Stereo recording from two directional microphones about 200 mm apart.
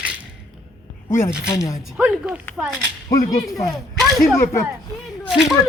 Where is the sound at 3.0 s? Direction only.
15° left (ahead or behind).